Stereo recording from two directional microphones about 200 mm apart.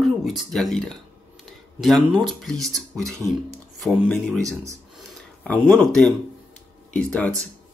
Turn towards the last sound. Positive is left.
turn(degrees=5)  # may be behind; listen again after turning